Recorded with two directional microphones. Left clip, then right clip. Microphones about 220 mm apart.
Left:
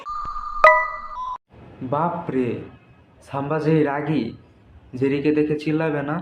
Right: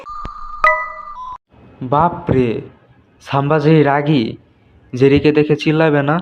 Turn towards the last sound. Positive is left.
turn(degrees=-45)  # may be behind; listen again after turning